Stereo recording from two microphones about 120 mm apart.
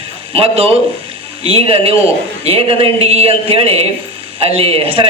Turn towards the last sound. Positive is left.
turn(degrees=-50)  # may be behind; listen again after turning